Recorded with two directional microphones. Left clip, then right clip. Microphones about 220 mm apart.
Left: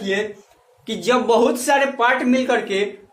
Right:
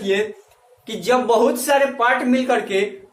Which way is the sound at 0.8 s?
30° left (ahead or behind).